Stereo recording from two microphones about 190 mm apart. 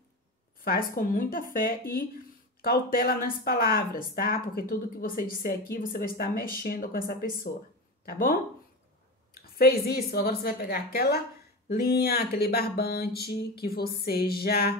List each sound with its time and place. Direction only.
0.7 s speech: 50° left (ahead or behind)
2.6 s speech: 55° left (ahead or behind)
8.0 s speech: 50° left (ahead or behind)
12.4 s a sound: 55° left (ahead or behind)